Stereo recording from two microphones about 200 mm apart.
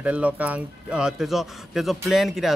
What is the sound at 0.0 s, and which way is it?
Speech, 5° right (ahead or behind).